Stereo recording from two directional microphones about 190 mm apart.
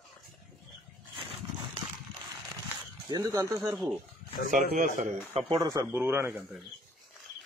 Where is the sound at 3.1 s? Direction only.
20° right (ahead or behind).